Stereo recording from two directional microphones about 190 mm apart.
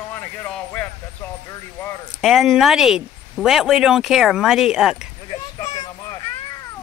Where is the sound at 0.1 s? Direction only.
10° left (ahead or behind).